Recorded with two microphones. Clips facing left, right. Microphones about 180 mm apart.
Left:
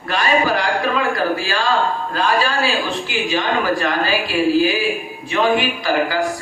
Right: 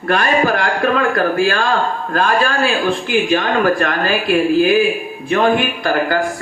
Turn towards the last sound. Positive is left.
turn(degrees=-55)  # may be behind; listen again after turning